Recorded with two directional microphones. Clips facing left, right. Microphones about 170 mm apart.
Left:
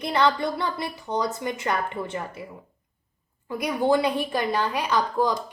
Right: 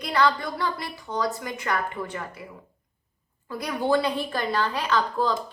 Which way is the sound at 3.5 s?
15° left (ahead or behind).